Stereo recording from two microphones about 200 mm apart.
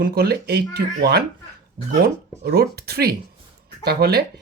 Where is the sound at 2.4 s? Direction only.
50° right (ahead or behind).